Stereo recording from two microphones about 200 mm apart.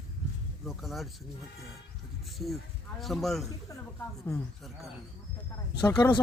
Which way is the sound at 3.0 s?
Centre (ahead or behind).